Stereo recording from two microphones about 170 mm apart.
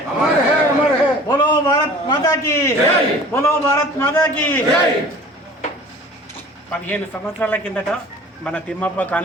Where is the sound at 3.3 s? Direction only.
15° left (ahead or behind).